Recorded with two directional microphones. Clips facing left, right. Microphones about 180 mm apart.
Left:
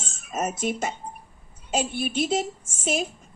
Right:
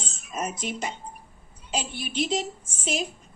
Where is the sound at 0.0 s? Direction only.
50° left (ahead or behind).